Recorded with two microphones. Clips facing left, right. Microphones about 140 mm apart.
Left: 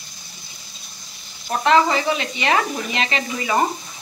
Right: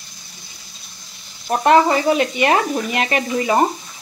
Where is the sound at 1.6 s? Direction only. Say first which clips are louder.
Right 3 dB; 50° right (ahead or behind).